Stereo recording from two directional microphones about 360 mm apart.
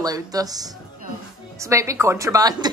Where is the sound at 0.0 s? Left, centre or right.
Centre.